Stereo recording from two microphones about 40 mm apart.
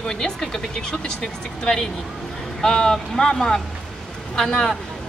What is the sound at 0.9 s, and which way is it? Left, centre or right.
A woman's voice, left.